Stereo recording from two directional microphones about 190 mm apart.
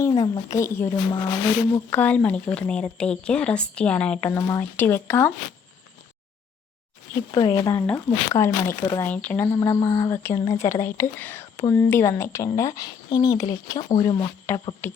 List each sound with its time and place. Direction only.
0.0 s speech: 20° left (ahead or behind)
7.2 s speech: 20° left (ahead or behind)
14.5 s speech: 10° left (ahead or behind)